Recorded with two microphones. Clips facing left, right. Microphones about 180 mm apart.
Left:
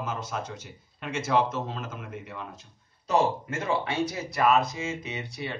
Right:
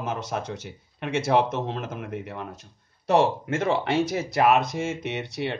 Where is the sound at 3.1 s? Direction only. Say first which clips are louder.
Right 4 dB; 75° right (ahead or behind).